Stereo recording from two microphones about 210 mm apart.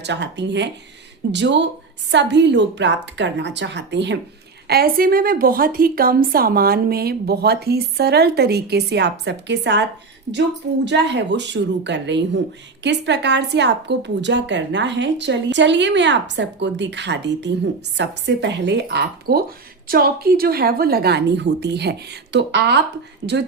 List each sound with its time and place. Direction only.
0.0 s a woman's voice: 55° right (ahead or behind)
10.8 s a woman's voice: 55° right (ahead or behind)